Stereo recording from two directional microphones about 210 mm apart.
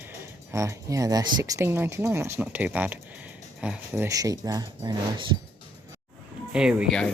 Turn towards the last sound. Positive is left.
turn(degrees=0)  # may be behind; listen again after turning